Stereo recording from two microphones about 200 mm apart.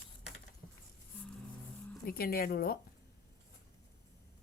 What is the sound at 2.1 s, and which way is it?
Speech, 50° left (ahead or behind).